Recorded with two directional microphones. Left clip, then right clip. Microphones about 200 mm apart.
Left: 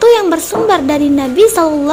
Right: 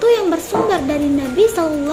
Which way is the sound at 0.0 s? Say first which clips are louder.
Left 6 dB; 40° left (ahead or behind).